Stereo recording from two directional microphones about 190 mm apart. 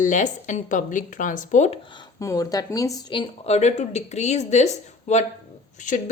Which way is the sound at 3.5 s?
35° left (ahead or behind).